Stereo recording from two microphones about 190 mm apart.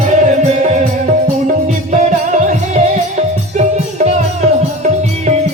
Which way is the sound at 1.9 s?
40° right (ahead or behind).